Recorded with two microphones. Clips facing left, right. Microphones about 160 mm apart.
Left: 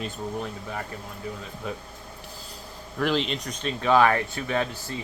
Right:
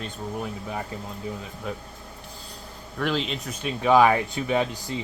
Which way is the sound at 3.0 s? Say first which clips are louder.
Left 1 dB; centre (ahead or behind).